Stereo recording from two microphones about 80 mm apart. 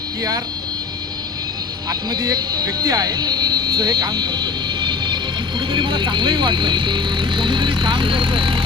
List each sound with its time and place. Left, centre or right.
0.2 s speech: right
1.9 s speech: right